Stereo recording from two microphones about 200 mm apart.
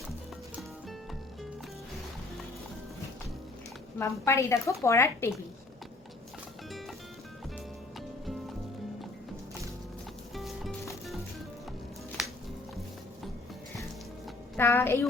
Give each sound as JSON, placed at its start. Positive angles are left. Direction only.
{"t": 3.9, "sound": "a woman's voice", "side_deg": 15}
{"t": 10.3, "sound": "music", "side_deg": 0}
{"t": 14.5, "sound": "a woman's voice", "side_deg": 10}